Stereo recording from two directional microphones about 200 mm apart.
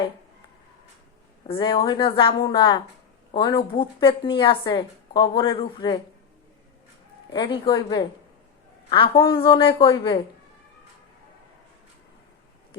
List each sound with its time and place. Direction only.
1.5 s a woman's voice: 25° left (ahead or behind)
7.3 s a woman's voice: 20° left (ahead or behind)